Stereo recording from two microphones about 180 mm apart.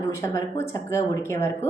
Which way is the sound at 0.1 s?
15° left (ahead or behind).